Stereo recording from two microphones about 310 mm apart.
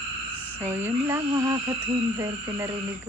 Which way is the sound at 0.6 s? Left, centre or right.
Centre.